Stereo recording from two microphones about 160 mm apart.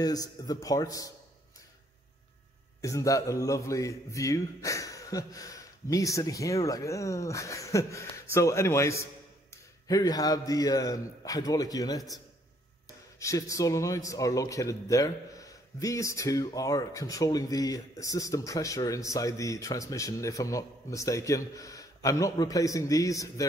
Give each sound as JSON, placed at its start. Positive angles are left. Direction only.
{"t": 0.0, "sound": "speech", "side_deg": 25}
{"t": 2.8, "sound": "speech", "side_deg": 20}
{"t": 13.2, "sound": "speech", "side_deg": 20}